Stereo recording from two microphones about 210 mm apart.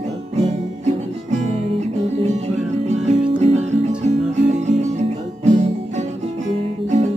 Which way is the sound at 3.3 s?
35° right (ahead or behind).